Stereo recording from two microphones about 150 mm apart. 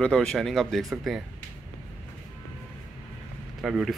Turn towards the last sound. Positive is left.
turn(degrees=-5)  # may be behind; listen again after turning